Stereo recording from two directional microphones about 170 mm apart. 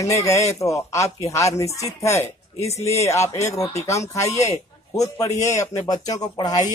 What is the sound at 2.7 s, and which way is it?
Speech, 40° left (ahead or behind).